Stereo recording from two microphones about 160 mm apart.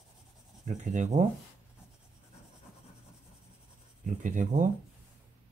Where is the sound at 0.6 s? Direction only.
50° right (ahead or behind).